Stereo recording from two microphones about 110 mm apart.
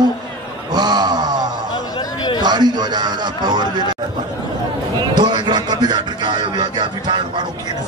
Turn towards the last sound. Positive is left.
turn(degrees=-45)  # may be behind; listen again after turning